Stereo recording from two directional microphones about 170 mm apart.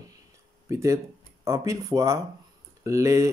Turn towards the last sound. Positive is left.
turn(degrees=-20)  # may be behind; listen again after turning